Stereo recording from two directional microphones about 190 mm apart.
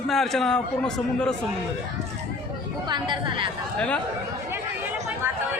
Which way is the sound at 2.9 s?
25° right (ahead or behind).